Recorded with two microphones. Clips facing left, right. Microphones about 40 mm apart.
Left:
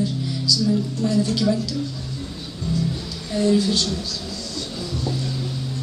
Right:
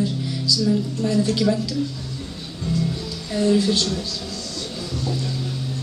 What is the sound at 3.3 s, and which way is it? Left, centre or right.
Speech, centre.